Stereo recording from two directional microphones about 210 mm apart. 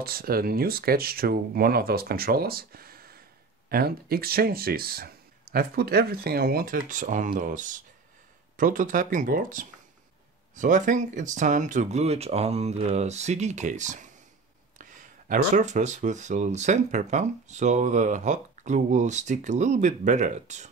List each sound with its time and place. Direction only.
0.0 s speech: 45° right (ahead or behind)